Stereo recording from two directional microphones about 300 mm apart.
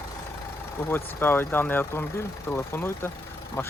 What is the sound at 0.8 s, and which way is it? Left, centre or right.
Speech, centre.